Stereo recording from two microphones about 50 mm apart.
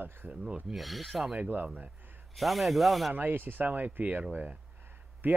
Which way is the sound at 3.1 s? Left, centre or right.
Right.